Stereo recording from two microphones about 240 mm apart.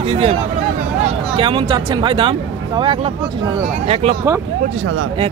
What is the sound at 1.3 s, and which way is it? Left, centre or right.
Speech, right.